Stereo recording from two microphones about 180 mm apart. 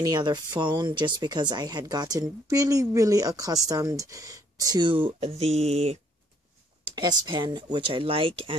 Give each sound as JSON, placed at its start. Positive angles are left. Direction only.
{"t": 0.0, "sound": "speech", "side_deg": -25}
{"t": 7.0, "sound": "speech", "side_deg": -25}